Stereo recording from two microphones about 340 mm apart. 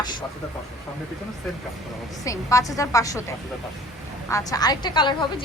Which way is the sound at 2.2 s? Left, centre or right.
Centre.